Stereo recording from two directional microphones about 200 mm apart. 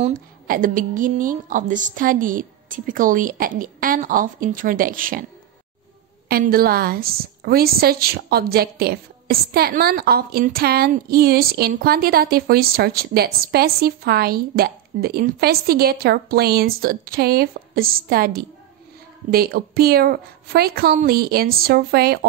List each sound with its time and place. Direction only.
0.0 s a woman's voice: 45° right (ahead or behind)
6.2 s a woman's voice: 50° right (ahead or behind)